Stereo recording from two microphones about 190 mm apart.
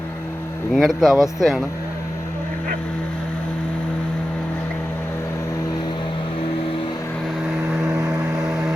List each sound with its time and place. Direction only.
0.7 s speech: centre (ahead or behind)